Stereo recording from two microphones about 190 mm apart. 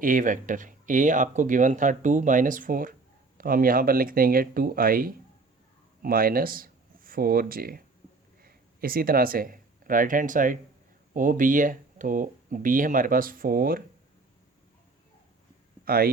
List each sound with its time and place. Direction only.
0.0 s speech: 45° right (ahead or behind)
15.8 s speech: 50° right (ahead or behind)